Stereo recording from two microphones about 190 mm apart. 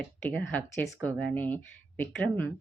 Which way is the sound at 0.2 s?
10° left (ahead or behind).